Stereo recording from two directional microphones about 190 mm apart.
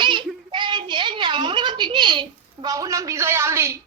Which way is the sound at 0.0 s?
25° right (ahead or behind).